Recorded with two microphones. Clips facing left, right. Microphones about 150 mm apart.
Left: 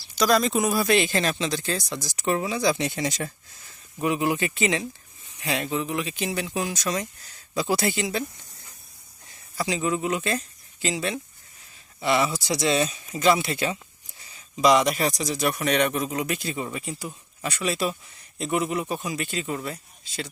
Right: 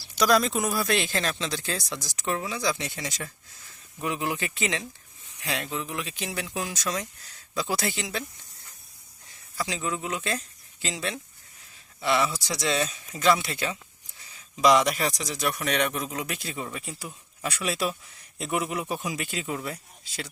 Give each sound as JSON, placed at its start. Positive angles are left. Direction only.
{"t": 0.2, "sound": "speech", "side_deg": -5}
{"t": 4.0, "sound": "speech", "side_deg": 10}
{"t": 9.6, "sound": "speech", "side_deg": 10}
{"t": 12.6, "sound": "speech", "side_deg": 20}
{"t": 12.9, "sound": "speech", "side_deg": 5}